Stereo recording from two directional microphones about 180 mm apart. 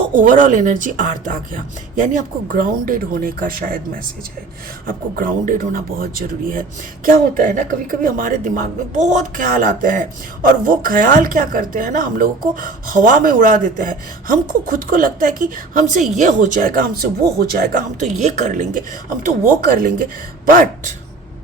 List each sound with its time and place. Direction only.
0.1 s speech: 45° right (ahead or behind)
4.9 s speech: 50° right (ahead or behind)